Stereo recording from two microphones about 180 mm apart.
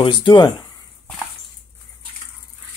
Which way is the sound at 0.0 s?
25° left (ahead or behind).